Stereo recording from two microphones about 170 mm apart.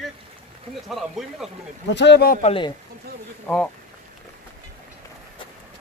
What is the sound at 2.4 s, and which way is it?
Speech, 30° left (ahead or behind).